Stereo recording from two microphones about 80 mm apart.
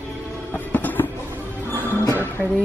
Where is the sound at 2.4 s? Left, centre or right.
Centre.